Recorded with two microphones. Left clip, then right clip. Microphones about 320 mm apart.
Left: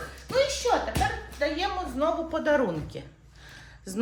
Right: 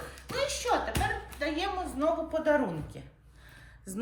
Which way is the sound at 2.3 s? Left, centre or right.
Centre.